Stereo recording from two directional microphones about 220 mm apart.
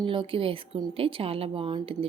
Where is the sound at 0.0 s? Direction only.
20° right (ahead or behind).